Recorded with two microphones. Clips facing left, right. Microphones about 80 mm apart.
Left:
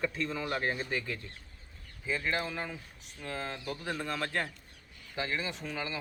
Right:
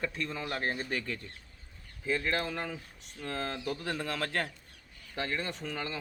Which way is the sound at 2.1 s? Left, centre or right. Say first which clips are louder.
Right 2 dB; centre.